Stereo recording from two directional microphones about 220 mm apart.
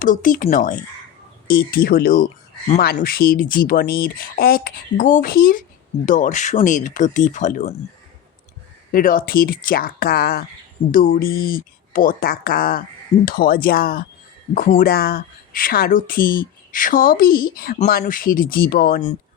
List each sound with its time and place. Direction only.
0.0 s speech: 35° left (ahead or behind)
8.9 s speech: 40° left (ahead or behind)